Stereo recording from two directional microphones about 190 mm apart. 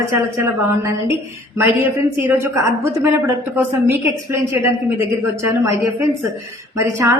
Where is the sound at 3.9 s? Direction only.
15° right (ahead or behind).